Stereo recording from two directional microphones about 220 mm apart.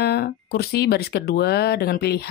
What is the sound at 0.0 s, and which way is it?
Speech, 45° left (ahead or behind).